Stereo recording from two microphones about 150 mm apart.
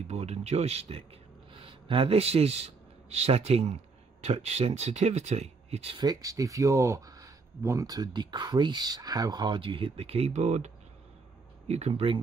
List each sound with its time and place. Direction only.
0.1 s a man's voice: 45° right (ahead or behind)
6.0 s speech: 20° right (ahead or behind); by 12.2 s 40° right (ahead or behind)